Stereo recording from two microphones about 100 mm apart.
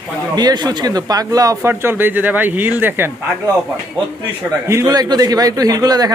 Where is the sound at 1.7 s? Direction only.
20° right (ahead or behind).